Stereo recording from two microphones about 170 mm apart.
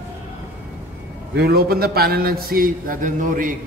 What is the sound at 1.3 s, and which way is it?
A man's voice, 65° right (ahead or behind).